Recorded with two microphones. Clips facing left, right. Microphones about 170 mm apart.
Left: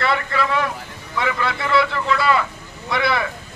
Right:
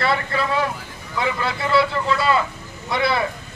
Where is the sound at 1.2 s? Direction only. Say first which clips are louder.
Left 1 dB; 25° right (ahead or behind).